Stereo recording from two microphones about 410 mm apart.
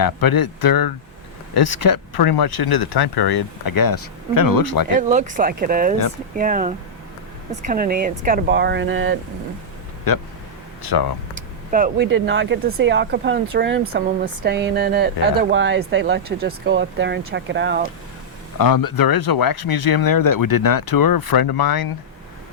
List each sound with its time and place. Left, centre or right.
0.0 s speech: left
4.9 s speech: centre
10.9 s speech: left
11.3 s speech: centre
18.6 s speech: left